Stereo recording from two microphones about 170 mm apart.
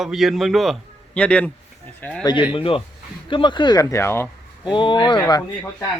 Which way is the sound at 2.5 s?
30° left (ahead or behind).